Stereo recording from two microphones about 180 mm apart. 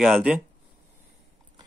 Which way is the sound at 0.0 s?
5° right (ahead or behind).